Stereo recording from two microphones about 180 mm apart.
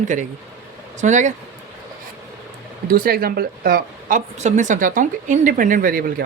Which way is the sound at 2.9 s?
55° right (ahead or behind).